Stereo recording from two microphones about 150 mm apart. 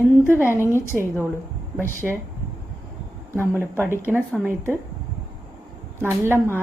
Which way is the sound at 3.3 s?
15° right (ahead or behind).